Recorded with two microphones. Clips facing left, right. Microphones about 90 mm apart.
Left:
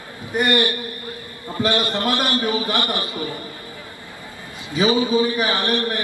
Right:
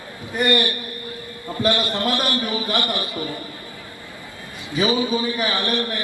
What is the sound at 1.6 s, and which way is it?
A man's voice, 20° left (ahead or behind).